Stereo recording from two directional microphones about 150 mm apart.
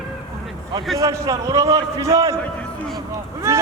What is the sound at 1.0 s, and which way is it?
A man's voice, 25° right (ahead or behind).